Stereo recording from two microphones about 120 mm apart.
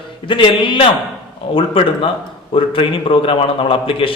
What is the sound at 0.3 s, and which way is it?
A man's voice, 45° left (ahead or behind).